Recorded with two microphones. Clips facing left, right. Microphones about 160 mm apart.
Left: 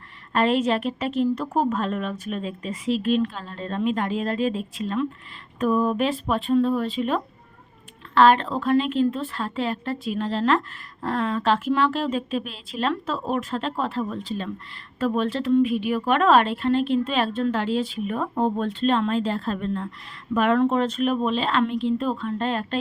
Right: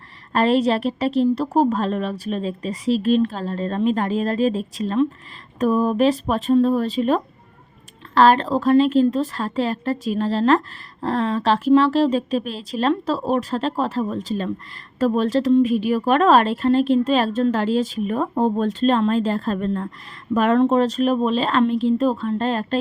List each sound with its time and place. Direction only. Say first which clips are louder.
0.3 s a woman's voice: right 3 dB; 35° right (ahead or behind)